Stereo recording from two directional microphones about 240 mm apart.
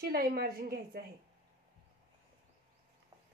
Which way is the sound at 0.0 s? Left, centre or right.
Right.